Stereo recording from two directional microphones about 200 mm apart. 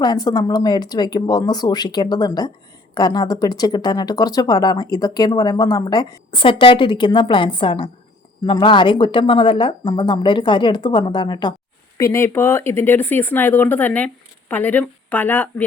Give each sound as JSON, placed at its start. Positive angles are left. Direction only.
{"t": 0.0, "sound": "speech", "side_deg": 20}